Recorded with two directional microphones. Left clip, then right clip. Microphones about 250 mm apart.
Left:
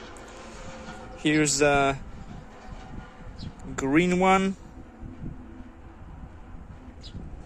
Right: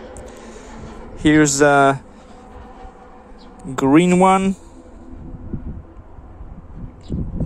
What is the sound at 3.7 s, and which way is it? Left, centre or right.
Speech, centre.